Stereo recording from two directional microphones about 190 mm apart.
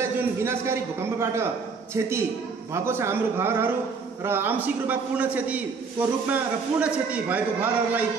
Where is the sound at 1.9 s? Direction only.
15° right (ahead or behind).